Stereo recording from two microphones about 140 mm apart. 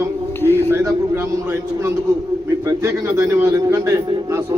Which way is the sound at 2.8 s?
20° right (ahead or behind).